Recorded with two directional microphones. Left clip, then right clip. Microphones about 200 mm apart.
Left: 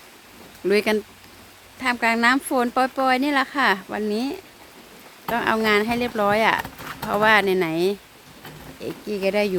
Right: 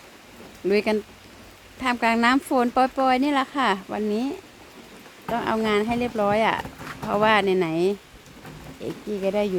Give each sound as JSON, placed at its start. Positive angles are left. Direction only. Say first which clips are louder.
{"t": 0.7, "sound": "speech", "louder": "left 2 dB", "side_deg": 10}
{"t": 1.8, "sound": "speech", "louder": "left 1 dB", "side_deg": -5}